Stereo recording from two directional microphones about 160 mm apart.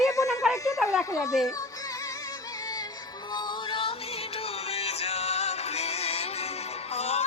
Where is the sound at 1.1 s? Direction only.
20° left (ahead or behind).